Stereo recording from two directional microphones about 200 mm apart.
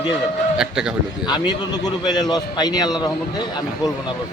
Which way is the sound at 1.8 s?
20° left (ahead or behind).